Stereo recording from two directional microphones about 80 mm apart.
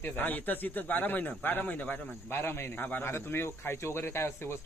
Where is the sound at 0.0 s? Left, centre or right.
Left.